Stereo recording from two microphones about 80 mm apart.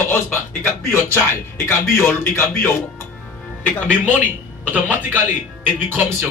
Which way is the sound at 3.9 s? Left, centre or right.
Right.